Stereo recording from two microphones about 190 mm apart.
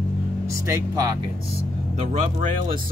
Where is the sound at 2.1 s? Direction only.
40° right (ahead or behind).